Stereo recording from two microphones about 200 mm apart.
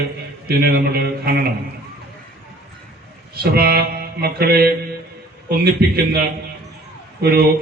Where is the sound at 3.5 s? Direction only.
50° right (ahead or behind).